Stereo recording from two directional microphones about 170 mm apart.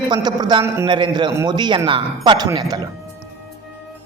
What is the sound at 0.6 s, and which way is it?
Speech, 15° right (ahead or behind).